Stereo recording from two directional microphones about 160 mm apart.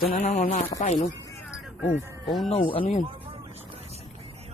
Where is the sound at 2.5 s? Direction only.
35° left (ahead or behind).